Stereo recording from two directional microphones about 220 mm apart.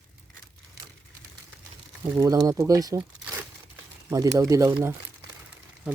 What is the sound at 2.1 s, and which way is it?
Speech, 15° right (ahead or behind).